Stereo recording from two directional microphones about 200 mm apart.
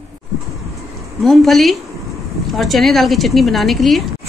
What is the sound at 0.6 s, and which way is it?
Bird, centre (ahead or behind).